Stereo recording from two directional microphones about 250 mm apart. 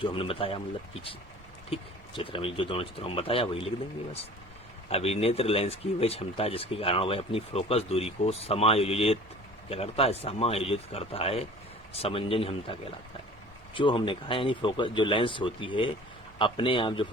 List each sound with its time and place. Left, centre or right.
0.0 s speech: left
1.7 s speech: centre
4.9 s speech: left
13.7 s speech: centre